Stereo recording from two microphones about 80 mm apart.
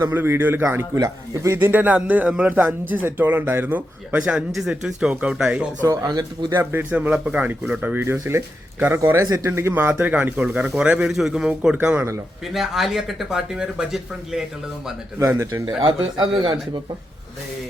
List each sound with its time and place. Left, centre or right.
0.1 s speech: right
1.5 s speech: right
5.8 s speech: right
6.5 s speech: right
8.0 s speech: right
9.2 s speech: right
9.5 s speech: right
9.9 s speech: centre
12.5 s speech: centre
15.8 s a man's voice: right